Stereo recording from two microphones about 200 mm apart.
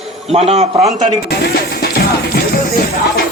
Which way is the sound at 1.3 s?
50° left (ahead or behind).